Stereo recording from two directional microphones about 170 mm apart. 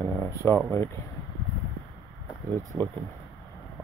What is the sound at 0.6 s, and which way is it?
Speech, 10° left (ahead or behind).